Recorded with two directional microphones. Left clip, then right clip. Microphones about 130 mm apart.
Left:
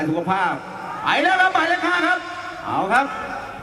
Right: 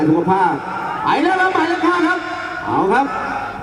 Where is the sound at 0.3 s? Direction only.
25° left (ahead or behind).